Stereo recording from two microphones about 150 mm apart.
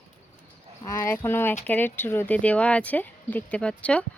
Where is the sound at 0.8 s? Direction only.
20° left (ahead or behind).